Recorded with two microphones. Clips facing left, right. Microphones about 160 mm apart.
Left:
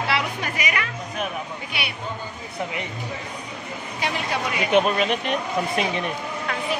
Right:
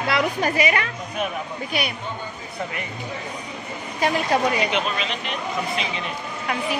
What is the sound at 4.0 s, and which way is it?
Speech, 40° right (ahead or behind).